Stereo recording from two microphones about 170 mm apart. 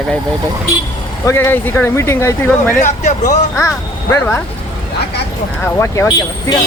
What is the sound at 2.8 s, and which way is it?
Speech, 45° left (ahead or behind).